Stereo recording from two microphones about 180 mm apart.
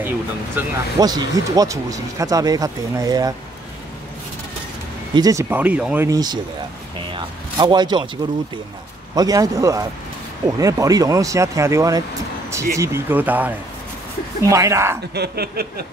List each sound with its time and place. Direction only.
0.6 s speech: 20° right (ahead or behind)
5.1 s speech: 20° right (ahead or behind)
6.0 s speech: 20° right (ahead or behind)
7.5 s speech: 25° right (ahead or behind)
9.1 s speech: 20° right (ahead or behind)
15.1 s speech: 65° right (ahead or behind)